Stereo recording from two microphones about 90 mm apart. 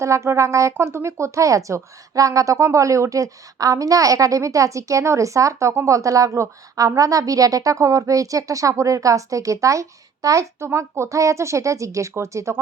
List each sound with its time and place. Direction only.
0.0 s a woman's voice: 35° right (ahead or behind)